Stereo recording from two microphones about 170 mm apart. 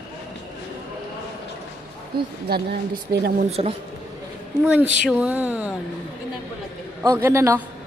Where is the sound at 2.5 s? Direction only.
65° right (ahead or behind).